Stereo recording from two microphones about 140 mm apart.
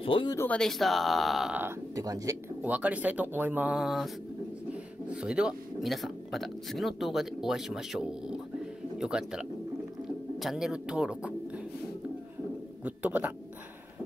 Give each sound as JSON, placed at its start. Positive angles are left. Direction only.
{"t": 0.0, "sound": "speech", "side_deg": 35}
{"t": 0.4, "sound": "speech", "side_deg": 5}
{"t": 2.0, "sound": "speech", "side_deg": -25}
{"t": 2.6, "sound": "speech", "side_deg": -10}
{"t": 5.1, "sound": "speech", "side_deg": -5}
{"t": 12.8, "sound": "speech", "side_deg": -10}